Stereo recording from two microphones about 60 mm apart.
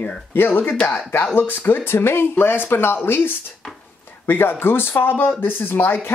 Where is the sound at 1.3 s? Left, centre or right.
Left.